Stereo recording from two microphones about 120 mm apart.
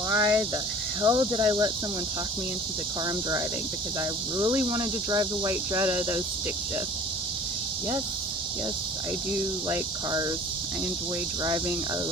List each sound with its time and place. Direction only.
0.1 s a sound: 30° right (ahead or behind)
1.0 s speech: 35° right (ahead or behind)
4.5 s speech: 25° right (ahead or behind)
9.3 s speech: 20° right (ahead or behind)